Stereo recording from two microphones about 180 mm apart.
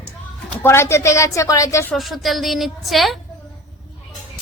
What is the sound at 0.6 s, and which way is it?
Speech, 15° left (ahead or behind).